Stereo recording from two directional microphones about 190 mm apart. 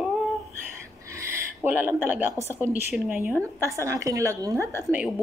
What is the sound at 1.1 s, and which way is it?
A woman's voice, 10° right (ahead or behind).